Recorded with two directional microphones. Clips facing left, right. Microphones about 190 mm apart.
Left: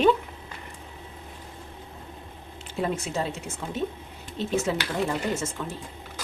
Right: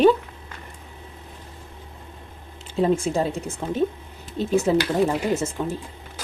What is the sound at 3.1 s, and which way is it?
Speech, 35° right (ahead or behind).